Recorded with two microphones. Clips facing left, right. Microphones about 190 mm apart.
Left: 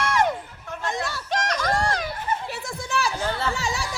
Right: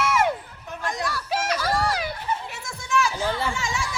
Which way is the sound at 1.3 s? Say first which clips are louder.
Left 1 dB; 5° right (ahead or behind).